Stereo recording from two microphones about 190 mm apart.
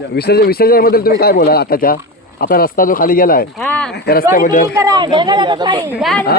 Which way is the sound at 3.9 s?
55° left (ahead or behind).